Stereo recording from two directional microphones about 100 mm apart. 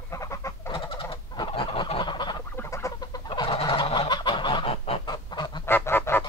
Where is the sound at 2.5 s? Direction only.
30° left (ahead or behind).